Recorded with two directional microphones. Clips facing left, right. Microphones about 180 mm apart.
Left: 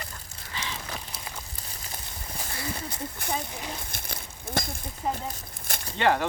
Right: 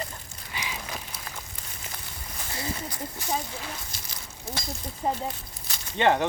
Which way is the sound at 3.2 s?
55° left (ahead or behind).